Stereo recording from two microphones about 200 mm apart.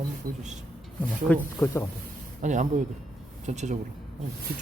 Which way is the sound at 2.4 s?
35° right (ahead or behind).